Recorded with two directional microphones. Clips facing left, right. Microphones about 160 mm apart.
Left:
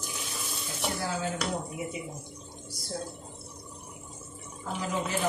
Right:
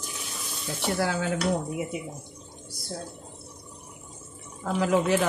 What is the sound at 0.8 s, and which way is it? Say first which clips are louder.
Dishes: right 5 dB; 70° right (ahead or behind).